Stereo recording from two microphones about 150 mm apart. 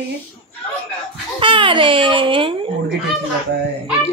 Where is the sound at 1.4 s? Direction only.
35° right (ahead or behind).